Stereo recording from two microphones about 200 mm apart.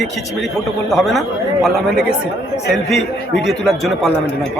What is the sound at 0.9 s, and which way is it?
Speech, centre (ahead or behind).